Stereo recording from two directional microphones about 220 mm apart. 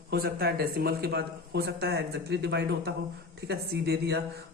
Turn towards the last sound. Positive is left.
turn(degrees=-45)  # may be behind; listen again after turning